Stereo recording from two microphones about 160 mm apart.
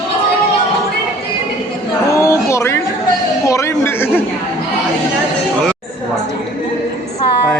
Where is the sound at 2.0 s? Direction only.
20° left (ahead or behind).